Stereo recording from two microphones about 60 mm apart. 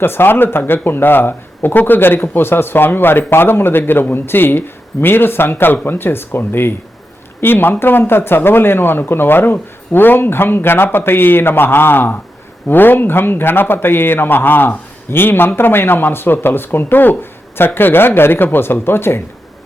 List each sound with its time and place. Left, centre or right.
0.0 s a man's voice: left